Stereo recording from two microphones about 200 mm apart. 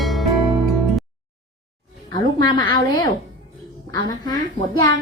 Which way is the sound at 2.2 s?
20° left (ahead or behind).